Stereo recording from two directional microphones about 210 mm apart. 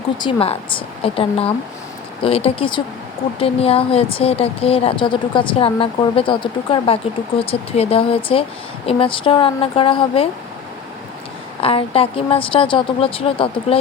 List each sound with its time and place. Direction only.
0.2 s speech: 25° left (ahead or behind)
11.6 s speech: 25° left (ahead or behind)